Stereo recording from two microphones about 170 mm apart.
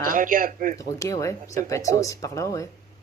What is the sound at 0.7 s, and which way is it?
Speech, 20° left (ahead or behind).